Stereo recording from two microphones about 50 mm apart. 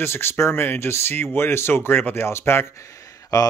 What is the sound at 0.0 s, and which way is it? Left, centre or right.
Speech, left.